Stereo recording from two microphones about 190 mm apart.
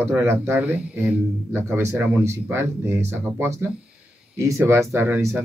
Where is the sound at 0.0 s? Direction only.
10° right (ahead or behind).